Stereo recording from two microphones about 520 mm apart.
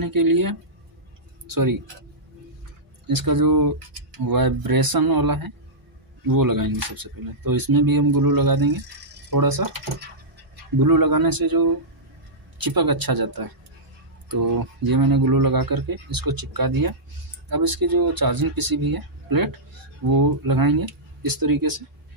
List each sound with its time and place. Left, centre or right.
0.0 s speech: right
3.1 s speech: right
10.8 s speech: right